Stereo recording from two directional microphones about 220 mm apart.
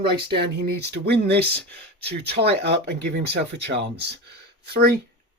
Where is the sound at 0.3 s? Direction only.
45° right (ahead or behind).